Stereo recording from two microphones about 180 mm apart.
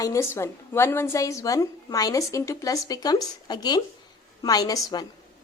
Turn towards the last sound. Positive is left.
turn(degrees=20)  # may be behind; listen again after turning